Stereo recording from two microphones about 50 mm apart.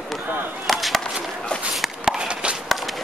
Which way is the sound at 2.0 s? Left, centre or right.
Centre.